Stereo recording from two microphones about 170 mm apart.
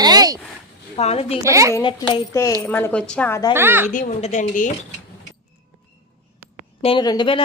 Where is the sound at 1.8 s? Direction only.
30° left (ahead or behind).